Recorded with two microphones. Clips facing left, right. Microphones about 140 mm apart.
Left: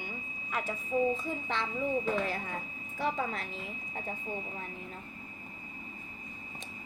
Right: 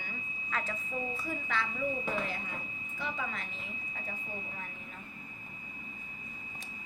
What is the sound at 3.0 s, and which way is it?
Speech, 40° left (ahead or behind).